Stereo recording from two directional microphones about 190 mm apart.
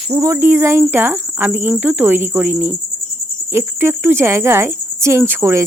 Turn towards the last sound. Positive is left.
turn(degrees=-15)  # may be behind; listen again after turning